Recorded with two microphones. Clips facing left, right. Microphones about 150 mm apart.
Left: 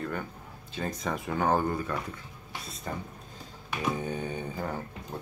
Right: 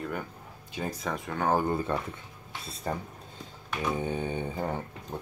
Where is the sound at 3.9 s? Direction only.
25° right (ahead or behind).